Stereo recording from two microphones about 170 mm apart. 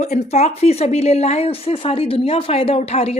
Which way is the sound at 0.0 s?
40° left (ahead or behind).